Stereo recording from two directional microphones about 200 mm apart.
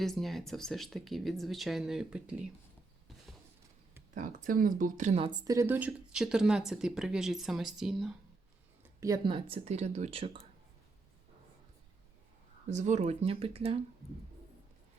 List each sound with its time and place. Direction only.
0.0 s speech: centre (ahead or behind)
4.1 s speech: 40° right (ahead or behind)
5.2 s speech: 20° right (ahead or behind); by 8.1 s centre (ahead or behind)
8.8 s speech: 15° right (ahead or behind)
12.7 s speech: 35° right (ahead or behind)